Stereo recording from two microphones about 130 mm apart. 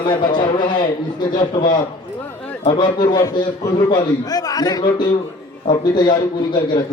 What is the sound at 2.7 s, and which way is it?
A man's voice, 35° left (ahead or behind).